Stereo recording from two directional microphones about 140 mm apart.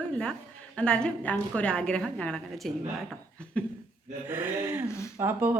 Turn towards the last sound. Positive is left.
turn(degrees=-15)  # may be behind; listen again after turning